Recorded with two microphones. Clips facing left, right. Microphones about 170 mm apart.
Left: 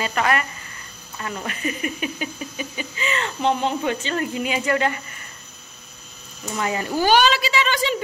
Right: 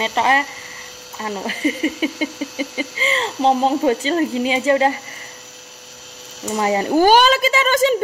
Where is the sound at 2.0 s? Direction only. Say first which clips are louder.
Right 7 dB; 90° right.